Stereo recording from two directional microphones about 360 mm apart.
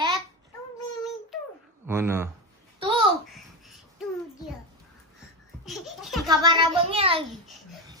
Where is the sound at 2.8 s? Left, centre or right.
Centre.